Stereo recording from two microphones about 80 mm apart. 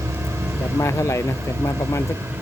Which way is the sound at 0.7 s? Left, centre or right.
Left.